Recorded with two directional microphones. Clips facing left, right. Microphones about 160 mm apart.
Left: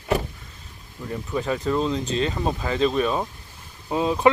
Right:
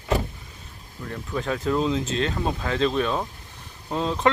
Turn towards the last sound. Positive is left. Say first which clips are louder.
# left 3 dB
turn(degrees=10)  # may be behind; listen again after turning